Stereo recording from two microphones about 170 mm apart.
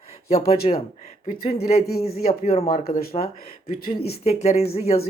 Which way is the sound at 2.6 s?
55° left (ahead or behind).